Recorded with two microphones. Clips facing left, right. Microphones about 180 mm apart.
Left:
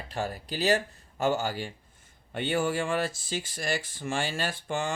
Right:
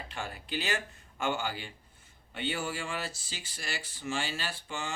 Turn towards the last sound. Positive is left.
turn(degrees=50)  # may be behind; listen again after turning